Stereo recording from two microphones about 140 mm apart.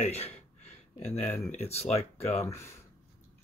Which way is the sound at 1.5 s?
50° left (ahead or behind).